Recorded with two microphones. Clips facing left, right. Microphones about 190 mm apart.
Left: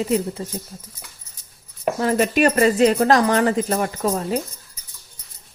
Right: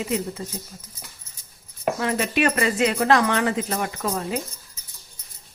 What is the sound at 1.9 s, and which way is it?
Speech, 40° left (ahead or behind).